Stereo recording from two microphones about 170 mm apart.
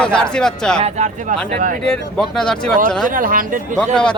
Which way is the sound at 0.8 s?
40° right (ahead or behind).